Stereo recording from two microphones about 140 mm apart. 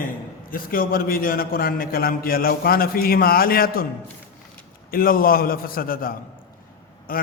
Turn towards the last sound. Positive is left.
turn(degrees=85)